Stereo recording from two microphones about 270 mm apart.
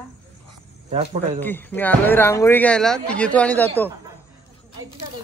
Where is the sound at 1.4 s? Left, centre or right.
Centre.